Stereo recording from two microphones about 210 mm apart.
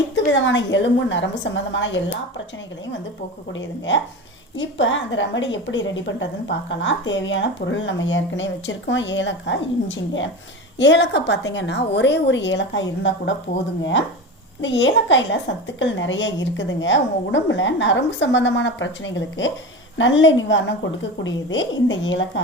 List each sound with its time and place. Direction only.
0.3 s a woman's voice: 60° left (ahead or behind)
3.5 s a woman's voice: 60° left (ahead or behind)
14.6 s a woman's voice: 60° left (ahead or behind)